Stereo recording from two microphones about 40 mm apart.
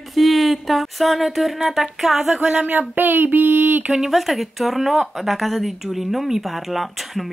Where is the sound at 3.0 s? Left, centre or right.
Right.